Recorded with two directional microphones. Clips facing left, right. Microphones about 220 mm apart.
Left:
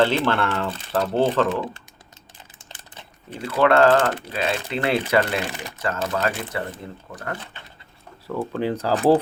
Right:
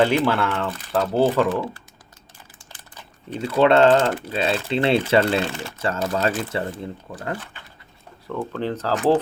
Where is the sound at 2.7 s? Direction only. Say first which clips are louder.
Left 1 dB; 25° left (ahead or behind).